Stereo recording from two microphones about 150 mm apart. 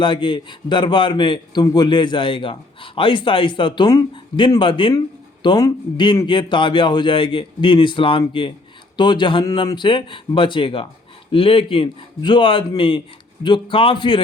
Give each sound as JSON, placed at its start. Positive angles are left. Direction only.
{"t": 0.0, "sound": "a man's voice", "side_deg": 30}